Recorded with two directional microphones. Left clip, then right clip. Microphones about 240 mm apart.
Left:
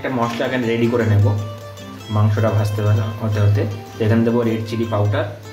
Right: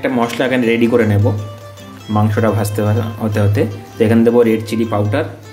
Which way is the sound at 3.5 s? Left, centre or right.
Right.